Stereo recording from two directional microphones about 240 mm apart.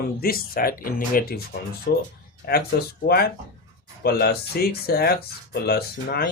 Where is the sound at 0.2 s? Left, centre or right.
Left.